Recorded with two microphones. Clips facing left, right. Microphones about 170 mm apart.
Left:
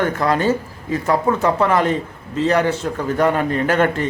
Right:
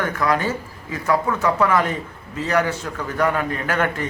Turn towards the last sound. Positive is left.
turn(degrees=30)  # may be behind; listen again after turning